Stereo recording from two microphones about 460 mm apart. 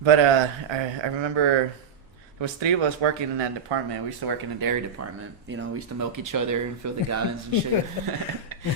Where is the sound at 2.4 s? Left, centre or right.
Right.